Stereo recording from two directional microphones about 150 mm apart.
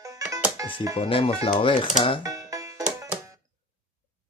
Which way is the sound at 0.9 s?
35° left (ahead or behind).